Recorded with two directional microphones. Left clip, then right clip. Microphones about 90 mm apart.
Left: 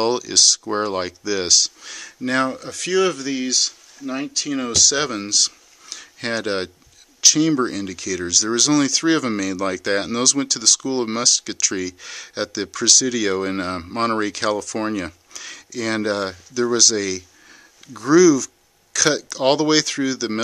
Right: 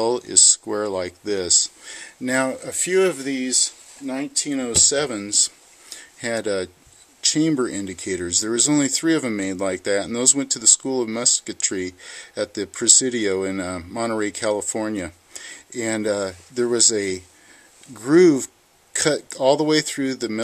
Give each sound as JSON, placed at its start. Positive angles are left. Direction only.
{"t": 0.0, "sound": "speech", "side_deg": 30}